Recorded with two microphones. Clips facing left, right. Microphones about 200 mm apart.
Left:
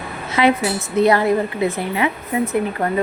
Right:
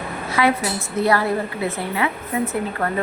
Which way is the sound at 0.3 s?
20° left (ahead or behind).